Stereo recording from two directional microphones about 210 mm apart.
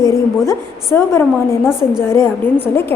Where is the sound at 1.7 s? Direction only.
5° right (ahead or behind).